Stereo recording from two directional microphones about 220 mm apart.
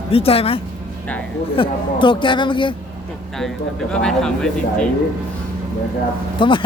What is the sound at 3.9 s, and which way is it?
Speech, 5° left (ahead or behind).